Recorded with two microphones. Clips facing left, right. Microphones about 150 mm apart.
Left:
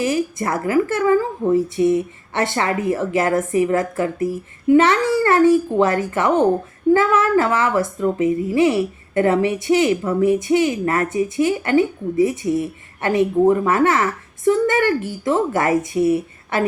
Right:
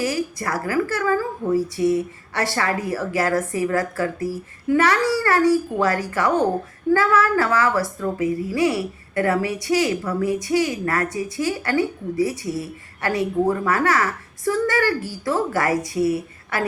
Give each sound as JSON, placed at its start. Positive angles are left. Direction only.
{"t": 0.0, "sound": "a woman's voice", "side_deg": 20}